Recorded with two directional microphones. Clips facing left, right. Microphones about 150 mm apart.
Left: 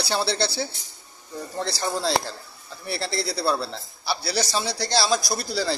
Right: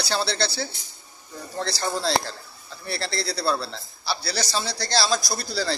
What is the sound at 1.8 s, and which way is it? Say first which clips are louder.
A man's voice: even; 10° left (ahead or behind).